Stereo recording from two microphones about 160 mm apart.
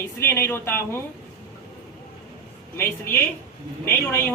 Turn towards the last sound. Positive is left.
turn(degrees=15)  # may be behind; listen again after turning